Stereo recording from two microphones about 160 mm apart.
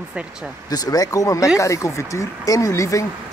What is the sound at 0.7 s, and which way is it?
Speech, 25° left (ahead or behind).